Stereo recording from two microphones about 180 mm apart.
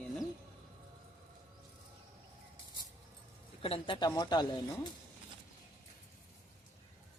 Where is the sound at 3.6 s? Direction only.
30° left (ahead or behind).